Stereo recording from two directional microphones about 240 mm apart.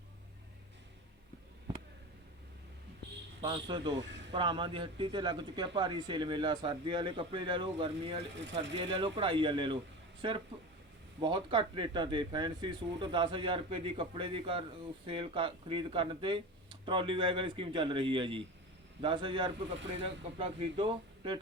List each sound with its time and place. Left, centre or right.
3.4 s speech: centre
4.0 s speech: right
4.3 s speech: right